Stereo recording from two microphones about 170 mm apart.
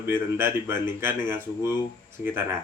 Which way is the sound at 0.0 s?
15° right (ahead or behind).